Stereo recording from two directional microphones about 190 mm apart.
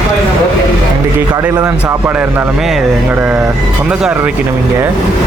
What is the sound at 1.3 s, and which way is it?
Speech, 10° right (ahead or behind).